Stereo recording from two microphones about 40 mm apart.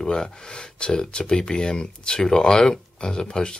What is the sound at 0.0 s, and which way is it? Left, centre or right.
Speech, centre.